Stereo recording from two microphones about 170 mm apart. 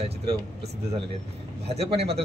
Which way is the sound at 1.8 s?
35° right (ahead or behind).